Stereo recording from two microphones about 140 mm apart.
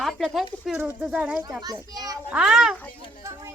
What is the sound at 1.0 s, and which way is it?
Speech, 5° right (ahead or behind).